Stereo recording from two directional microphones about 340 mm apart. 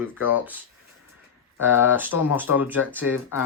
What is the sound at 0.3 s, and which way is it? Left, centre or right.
Speech, centre.